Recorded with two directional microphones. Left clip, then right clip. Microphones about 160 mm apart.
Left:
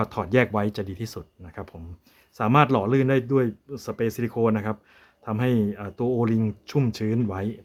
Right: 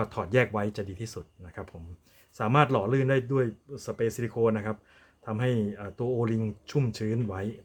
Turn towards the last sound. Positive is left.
turn(degrees=30)  # may be behind; listen again after turning